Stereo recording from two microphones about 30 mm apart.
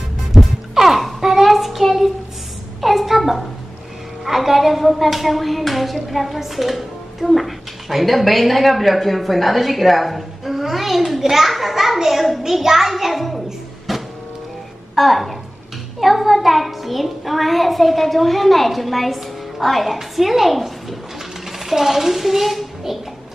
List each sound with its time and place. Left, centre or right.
0.3 s music: centre
1.2 s child singing: centre
2.8 s a sound: centre
4.2 s a child's voice: centre
13.9 s music: centre
15.0 s a woman's voice: centre